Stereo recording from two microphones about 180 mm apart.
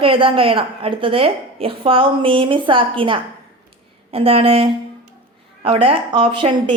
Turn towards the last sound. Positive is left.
turn(degrees=-30)  # may be behind; listen again after turning